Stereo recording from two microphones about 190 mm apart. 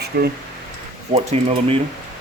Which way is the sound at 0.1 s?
55° right (ahead or behind).